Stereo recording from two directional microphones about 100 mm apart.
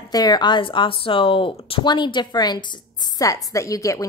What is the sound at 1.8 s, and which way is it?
Speech, 50° left (ahead or behind).